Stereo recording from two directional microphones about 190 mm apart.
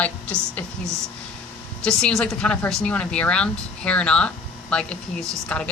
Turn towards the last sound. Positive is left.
turn(degrees=5)  # may be behind; listen again after turning